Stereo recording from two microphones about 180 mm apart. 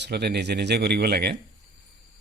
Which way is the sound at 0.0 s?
65° right (ahead or behind).